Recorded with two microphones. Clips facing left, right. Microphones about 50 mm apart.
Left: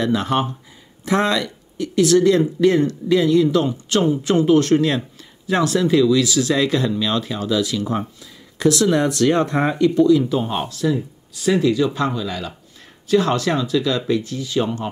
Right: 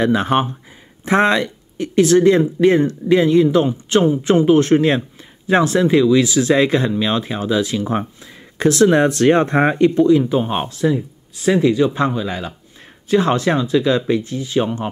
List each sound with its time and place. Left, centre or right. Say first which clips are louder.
0.0 s speech: right 3 dB; right